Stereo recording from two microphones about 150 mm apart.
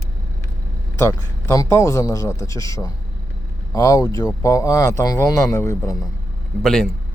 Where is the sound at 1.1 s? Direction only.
20° left (ahead or behind).